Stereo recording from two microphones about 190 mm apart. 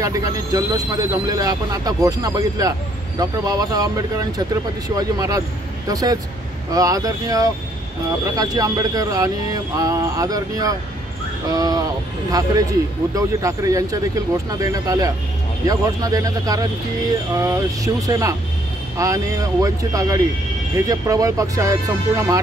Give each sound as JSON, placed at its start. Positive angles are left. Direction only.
{"t": 0.0, "sound": "speech", "side_deg": -20}